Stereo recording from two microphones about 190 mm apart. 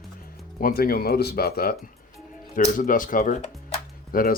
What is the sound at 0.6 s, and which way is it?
Speech, 50° left (ahead or behind).